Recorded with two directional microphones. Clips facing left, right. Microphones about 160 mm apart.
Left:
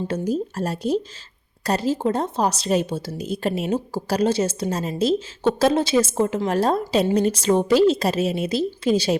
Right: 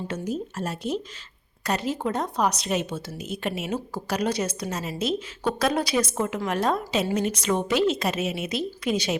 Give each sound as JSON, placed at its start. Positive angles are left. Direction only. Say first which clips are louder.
{"t": 0.1, "sound": "speech", "louder": "left 6 dB", "side_deg": 35}